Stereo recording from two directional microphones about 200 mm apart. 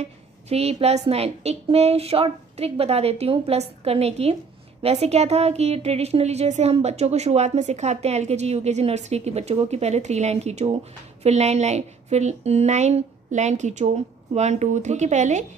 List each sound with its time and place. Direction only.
0.0 s speech: 30° right (ahead or behind)